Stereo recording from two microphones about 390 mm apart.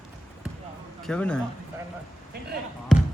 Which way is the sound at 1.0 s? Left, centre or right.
Centre.